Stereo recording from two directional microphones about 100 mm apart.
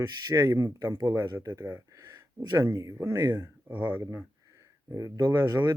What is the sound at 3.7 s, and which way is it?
Speech, 15° right (ahead or behind).